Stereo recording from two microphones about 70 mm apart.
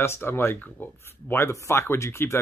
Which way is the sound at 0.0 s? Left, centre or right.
Left.